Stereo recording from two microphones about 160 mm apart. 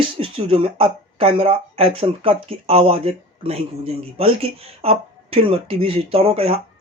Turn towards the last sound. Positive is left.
turn(degrees=-35)  # may be behind; listen again after turning